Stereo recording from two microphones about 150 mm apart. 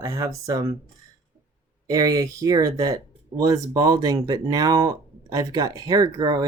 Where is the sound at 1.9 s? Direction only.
25° right (ahead or behind).